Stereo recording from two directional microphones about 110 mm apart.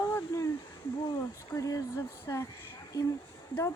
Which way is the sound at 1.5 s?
30° left (ahead or behind).